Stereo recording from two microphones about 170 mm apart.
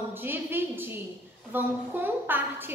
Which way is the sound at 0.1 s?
10° right (ahead or behind).